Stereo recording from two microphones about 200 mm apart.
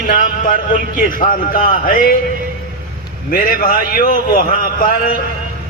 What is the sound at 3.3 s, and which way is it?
Speech, 45° left (ahead or behind).